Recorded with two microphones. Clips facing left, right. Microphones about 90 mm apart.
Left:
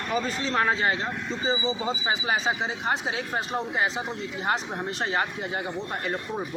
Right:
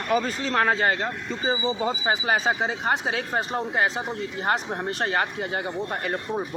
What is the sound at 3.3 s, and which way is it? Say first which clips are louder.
Speech: right 3 dB; 40° right (ahead or behind).